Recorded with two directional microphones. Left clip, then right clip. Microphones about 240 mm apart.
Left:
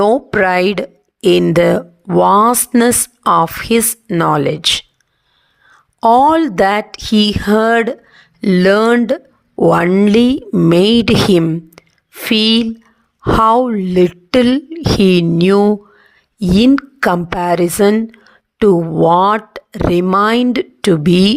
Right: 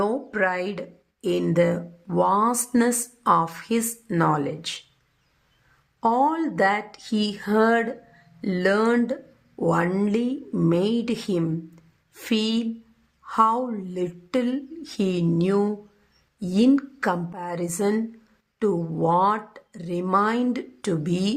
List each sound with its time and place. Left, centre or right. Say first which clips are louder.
0.0 s speech: left 12 dB; left
6.0 s a woman's voice: left 12 dB; left